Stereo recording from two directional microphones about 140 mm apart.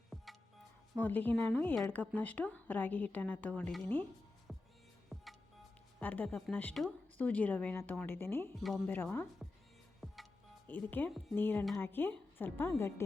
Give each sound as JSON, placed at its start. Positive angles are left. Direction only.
{"t": 0.1, "sound": "music", "side_deg": 0}
{"t": 0.9, "sound": "a woman's voice", "side_deg": 10}
{"t": 4.5, "sound": "music", "side_deg": 0}
{"t": 6.0, "sound": "a woman's voice", "side_deg": 10}
{"t": 8.5, "sound": "a woman's voice", "side_deg": 0}
{"t": 10.0, "sound": "music", "side_deg": 0}
{"t": 10.7, "sound": "a woman's voice", "side_deg": 15}